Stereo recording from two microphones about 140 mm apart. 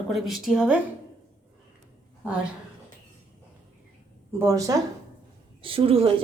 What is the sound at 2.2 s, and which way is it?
Speech, 10° right (ahead or behind).